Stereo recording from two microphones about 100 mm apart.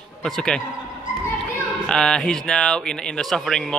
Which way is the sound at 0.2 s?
5° left (ahead or behind).